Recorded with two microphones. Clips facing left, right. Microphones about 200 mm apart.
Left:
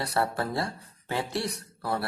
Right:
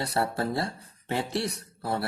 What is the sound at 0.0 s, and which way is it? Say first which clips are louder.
Speech: even; 25° right (ahead or behind).